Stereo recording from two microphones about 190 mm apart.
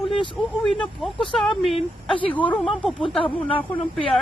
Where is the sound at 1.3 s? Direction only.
Centre (ahead or behind).